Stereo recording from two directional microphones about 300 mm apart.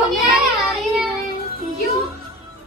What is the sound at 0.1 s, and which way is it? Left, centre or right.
Child singing, centre.